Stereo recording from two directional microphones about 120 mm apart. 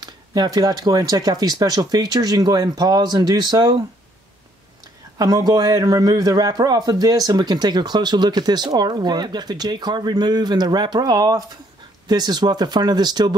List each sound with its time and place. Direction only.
0.0 s a man's voice: 35° right (ahead or behind)
5.2 s a man's voice: 30° right (ahead or behind)